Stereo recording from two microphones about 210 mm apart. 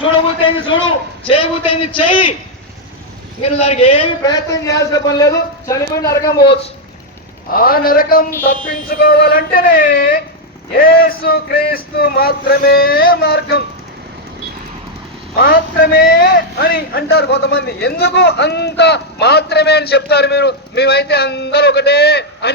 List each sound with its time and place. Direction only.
0.0 s a man's voice: 25° left (ahead or behind)
3.4 s a man's voice: 30° left (ahead or behind)
7.5 s a man's voice: 45° left (ahead or behind)
15.4 s a man's voice: 45° left (ahead or behind)